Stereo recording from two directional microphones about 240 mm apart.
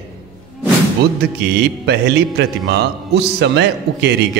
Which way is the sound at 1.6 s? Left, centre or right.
Right.